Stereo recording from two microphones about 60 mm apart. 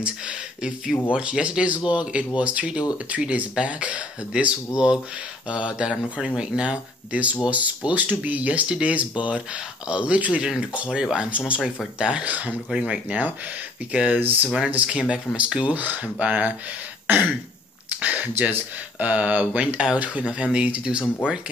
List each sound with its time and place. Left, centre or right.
0.0 s speech: centre
10.9 s speech: centre
17.1 s throat clearing: right
18.0 s speech: right